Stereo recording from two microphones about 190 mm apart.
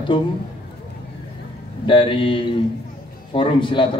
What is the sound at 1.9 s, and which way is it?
A man's voice, 25° left (ahead or behind).